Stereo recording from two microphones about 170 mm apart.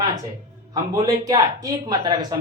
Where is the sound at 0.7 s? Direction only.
20° right (ahead or behind).